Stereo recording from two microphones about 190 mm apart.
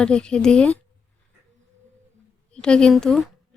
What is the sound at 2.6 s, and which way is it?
Speech, 5° left (ahead or behind).